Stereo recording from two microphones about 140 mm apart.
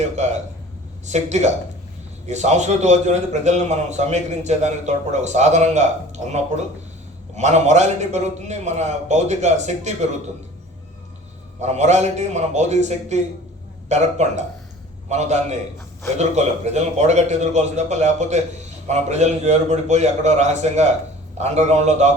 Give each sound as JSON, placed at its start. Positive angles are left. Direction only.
{"t": 1.0, "sound": "a man's voice", "side_deg": -55}
{"t": 7.3, "sound": "a man's voice", "side_deg": -55}
{"t": 11.6, "sound": "a man's voice", "side_deg": -55}